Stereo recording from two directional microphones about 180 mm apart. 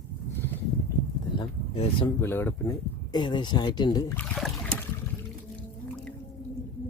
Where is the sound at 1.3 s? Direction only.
25° left (ahead or behind).